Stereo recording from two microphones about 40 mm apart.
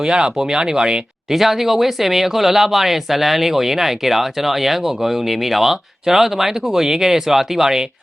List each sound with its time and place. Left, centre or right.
0.0 s speech: right
1.3 s speech: centre